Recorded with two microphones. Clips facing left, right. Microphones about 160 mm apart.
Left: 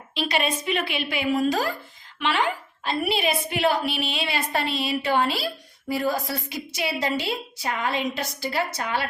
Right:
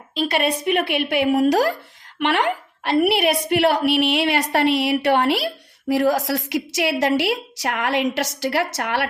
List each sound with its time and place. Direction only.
0.1 s a woman's voice: 50° right (ahead or behind); by 5.5 s 70° right (ahead or behind)
5.9 s a woman's voice: 85° right